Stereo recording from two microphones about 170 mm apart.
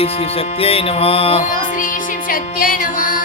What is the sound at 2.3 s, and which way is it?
Music, 55° left (ahead or behind).